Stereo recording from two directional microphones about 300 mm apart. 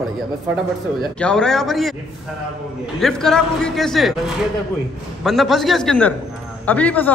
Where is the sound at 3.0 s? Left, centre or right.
Centre.